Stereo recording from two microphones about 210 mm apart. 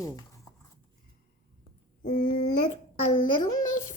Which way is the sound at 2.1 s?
45° left (ahead or behind).